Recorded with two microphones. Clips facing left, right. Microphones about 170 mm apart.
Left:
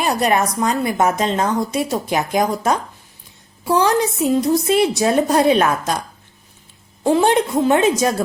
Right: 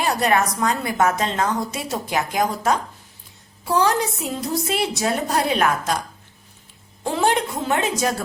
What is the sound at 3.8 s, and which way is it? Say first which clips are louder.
Speech: left 4 dB; 20° left (ahead or behind).